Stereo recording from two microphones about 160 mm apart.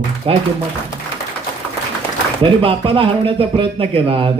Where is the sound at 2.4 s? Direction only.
35° right (ahead or behind).